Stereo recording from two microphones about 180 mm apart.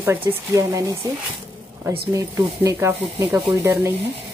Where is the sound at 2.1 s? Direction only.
20° right (ahead or behind).